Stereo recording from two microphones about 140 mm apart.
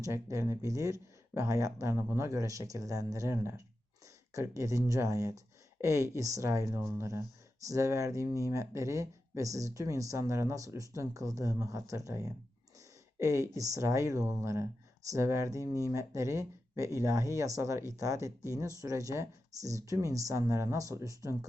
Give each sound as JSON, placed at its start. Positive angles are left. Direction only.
{"t": 0.0, "sound": "speech", "side_deg": -20}